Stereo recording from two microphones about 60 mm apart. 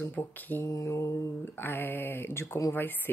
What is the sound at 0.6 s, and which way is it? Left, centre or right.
Mantra, left.